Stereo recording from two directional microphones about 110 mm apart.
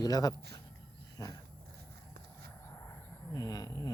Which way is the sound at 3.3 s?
35° left (ahead or behind).